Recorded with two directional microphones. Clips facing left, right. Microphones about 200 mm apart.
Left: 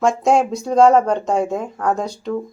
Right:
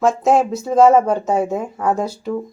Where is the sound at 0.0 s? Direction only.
Centre (ahead or behind).